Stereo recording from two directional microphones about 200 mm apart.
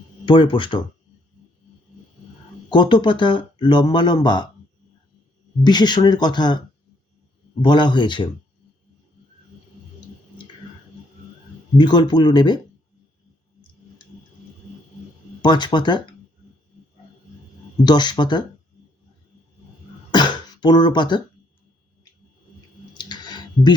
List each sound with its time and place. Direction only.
0.3 s speech: 25° left (ahead or behind)
2.6 s speech: 25° left (ahead or behind)
5.6 s speech: 20° left (ahead or behind)
7.6 s speech: 20° left (ahead or behind)
11.8 s speech: 20° left (ahead or behind)
15.4 s speech: 20° left (ahead or behind)
17.8 s speech: 20° left (ahead or behind)
20.1 s throat clearing: 20° left (ahead or behind)
23.0 s a sound: 20° left (ahead or behind)